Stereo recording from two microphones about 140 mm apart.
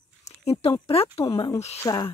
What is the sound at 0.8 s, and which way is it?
Speech, 45° left (ahead or behind).